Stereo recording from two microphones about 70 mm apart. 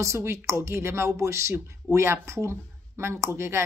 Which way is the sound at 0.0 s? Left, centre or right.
Right.